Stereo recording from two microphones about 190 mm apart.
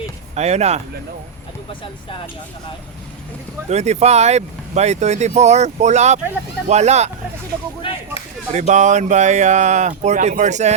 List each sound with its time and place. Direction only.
0.3 s speech: 35° right (ahead or behind)
3.7 s speech: 35° right (ahead or behind)
7.8 s speech: 30° left (ahead or behind)
8.5 s speech: 40° right (ahead or behind)